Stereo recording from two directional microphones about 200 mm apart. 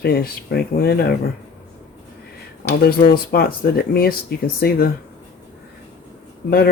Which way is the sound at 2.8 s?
50° left (ahead or behind).